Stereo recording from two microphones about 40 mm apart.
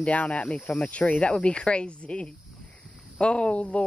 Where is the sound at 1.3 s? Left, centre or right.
Left.